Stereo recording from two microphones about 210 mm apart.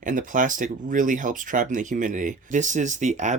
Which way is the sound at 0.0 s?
40° right (ahead or behind).